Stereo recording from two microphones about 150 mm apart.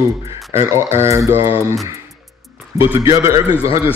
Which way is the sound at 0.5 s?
20° right (ahead or behind).